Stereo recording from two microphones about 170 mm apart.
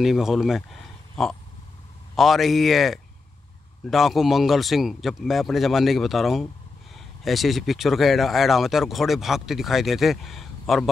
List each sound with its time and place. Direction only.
0.0 s speech: centre (ahead or behind)